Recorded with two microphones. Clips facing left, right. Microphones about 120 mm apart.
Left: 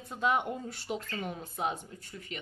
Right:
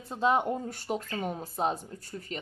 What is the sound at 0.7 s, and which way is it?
Speech, 45° right (ahead or behind).